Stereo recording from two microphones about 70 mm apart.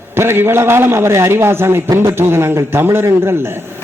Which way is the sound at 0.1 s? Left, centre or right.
Right.